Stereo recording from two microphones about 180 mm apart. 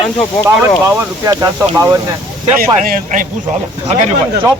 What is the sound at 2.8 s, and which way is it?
Speech, 50° right (ahead or behind).